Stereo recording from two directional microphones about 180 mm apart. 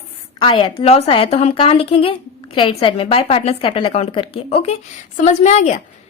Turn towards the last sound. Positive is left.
turn(degrees=40)  # may be behind; listen again after turning